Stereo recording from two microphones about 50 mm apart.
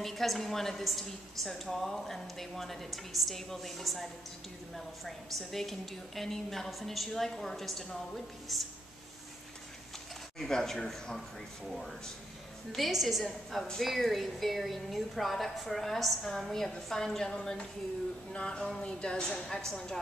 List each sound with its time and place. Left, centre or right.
0.0 s a woman's voice: centre
10.4 s a woman's voice: centre
12.7 s a woman's voice: centre